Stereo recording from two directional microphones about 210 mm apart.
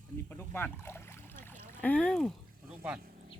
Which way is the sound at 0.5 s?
10° left (ahead or behind).